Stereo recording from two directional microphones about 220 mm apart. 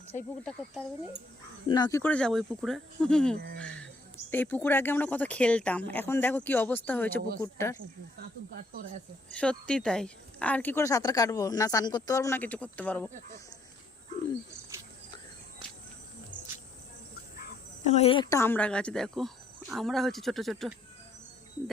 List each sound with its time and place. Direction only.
0.1 s speech: 30° left (ahead or behind)
1.7 s speech: 15° left (ahead or behind)
9.3 s speech: 5° left (ahead or behind)
17.8 s speech: 30° left (ahead or behind); by 20.7 s centre (ahead or behind)